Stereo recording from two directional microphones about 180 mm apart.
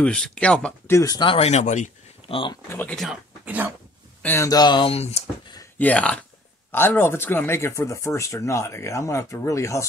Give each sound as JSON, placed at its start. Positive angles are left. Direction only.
{"t": 0.0, "sound": "speech", "side_deg": 5}
{"t": 2.7, "sound": "speech", "side_deg": 10}
{"t": 4.2, "sound": "speech", "side_deg": 15}
{"t": 5.8, "sound": "speech", "side_deg": 10}